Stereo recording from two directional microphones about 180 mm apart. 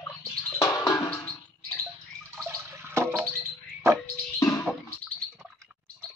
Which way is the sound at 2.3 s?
10° right (ahead or behind).